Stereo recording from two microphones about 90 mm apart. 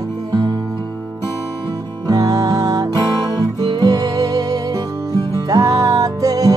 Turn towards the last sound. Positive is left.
turn(degrees=-40)  # may be behind; listen again after turning